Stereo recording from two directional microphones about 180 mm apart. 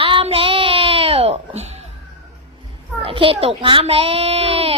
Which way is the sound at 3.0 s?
30° right (ahead or behind).